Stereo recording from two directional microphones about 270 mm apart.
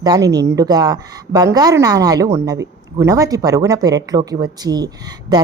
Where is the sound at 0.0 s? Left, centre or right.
Centre.